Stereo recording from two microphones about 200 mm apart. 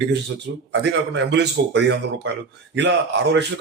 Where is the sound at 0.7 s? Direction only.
60° right (ahead or behind).